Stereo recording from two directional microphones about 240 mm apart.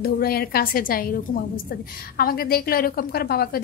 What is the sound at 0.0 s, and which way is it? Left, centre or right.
A woman's voice, left.